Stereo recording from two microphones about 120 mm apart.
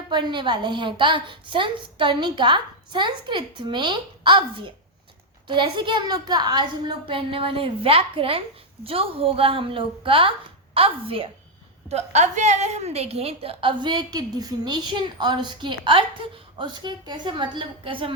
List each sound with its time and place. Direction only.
0.1 s a woman's voice: 40° right (ahead or behind)
11.9 s a woman's voice: 65° right (ahead or behind); by 18.1 s 45° right (ahead or behind)